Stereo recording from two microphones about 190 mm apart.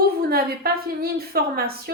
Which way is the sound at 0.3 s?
55° right (ahead or behind).